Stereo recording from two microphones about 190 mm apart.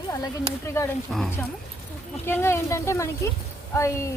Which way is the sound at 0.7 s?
15° left (ahead or behind).